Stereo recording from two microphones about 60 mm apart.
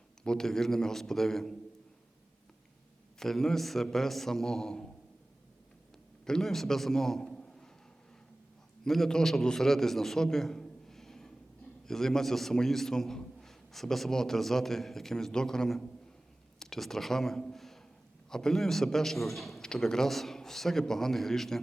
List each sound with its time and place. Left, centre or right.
0.3 s a man's voice: centre
3.2 s a man's voice: centre
6.2 s a man's voice: centre
7.3 s a sound: centre
8.8 s a man's voice: centre